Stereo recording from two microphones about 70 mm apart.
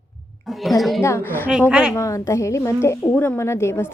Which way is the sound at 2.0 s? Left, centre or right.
Left.